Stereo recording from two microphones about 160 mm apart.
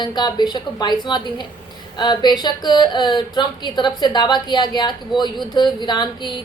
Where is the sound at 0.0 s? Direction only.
25° left (ahead or behind).